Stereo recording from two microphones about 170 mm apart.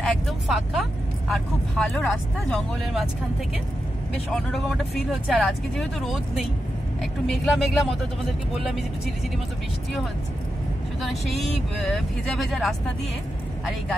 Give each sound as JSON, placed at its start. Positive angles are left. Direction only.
{"t": 0.0, "sound": "speech", "side_deg": 0}
{"t": 4.3, "sound": "speech", "side_deg": 5}
{"t": 11.8, "sound": "speech", "side_deg": 0}